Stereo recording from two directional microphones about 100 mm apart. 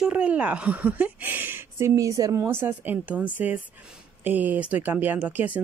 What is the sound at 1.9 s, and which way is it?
Speech, 35° right (ahead or behind).